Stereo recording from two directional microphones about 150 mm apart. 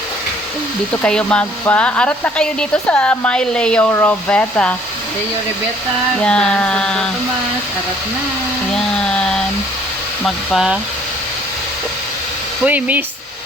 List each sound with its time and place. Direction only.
1.0 s speech: 5° left (ahead or behind)
6.1 s speech: 5° left (ahead or behind)
8.7 s a sound: 5° left (ahead or behind)
10.2 s speech: centre (ahead or behind)
12.6 s speech: 10° right (ahead or behind)